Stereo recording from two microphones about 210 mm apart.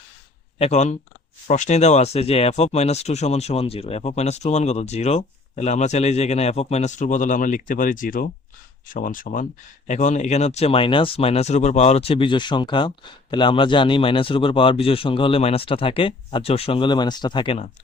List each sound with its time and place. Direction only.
0.6 s speech: 35° left (ahead or behind)